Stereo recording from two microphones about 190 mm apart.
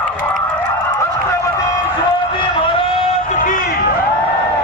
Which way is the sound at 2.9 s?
40° left (ahead or behind).